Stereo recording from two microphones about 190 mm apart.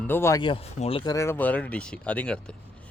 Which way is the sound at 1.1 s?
15° left (ahead or behind).